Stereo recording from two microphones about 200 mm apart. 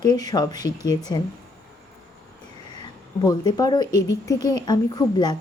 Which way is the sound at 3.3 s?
15° left (ahead or behind).